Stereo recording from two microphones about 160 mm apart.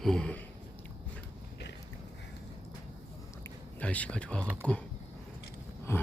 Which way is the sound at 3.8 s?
10° left (ahead or behind).